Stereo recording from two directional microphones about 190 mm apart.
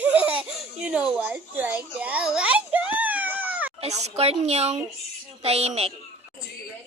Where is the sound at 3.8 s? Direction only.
35° right (ahead or behind).